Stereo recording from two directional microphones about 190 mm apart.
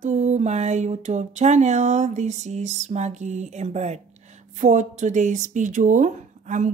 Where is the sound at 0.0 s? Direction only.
40° right (ahead or behind).